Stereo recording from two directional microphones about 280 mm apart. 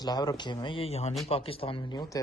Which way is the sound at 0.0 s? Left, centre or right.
Centre.